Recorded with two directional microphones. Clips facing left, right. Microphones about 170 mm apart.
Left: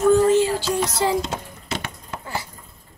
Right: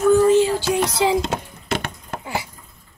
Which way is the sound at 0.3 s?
20° right (ahead or behind).